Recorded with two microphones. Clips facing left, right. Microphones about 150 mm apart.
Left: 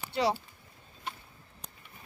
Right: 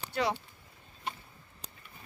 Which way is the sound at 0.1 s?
30° left (ahead or behind).